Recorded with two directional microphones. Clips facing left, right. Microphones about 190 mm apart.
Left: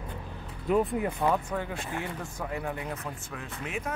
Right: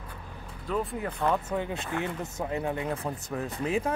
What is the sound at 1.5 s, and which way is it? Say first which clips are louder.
Speech: right 2 dB; 20° right (ahead or behind).